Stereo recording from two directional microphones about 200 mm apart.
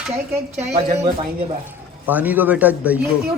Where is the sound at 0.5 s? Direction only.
40° right (ahead or behind).